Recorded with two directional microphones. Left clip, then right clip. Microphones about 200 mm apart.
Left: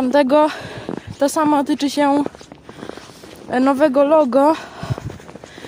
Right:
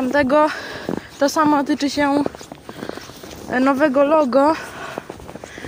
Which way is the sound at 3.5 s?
30° left (ahead or behind).